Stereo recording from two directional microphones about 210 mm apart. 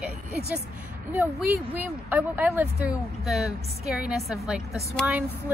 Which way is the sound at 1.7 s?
10° right (ahead or behind).